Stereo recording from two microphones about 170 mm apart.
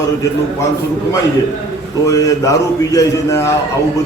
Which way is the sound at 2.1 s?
20° left (ahead or behind).